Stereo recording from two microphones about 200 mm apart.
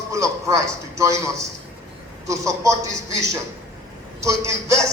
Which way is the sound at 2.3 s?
15° right (ahead or behind).